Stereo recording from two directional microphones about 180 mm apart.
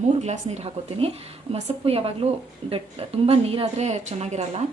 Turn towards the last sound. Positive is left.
turn(degrees=-40)  # may be behind; listen again after turning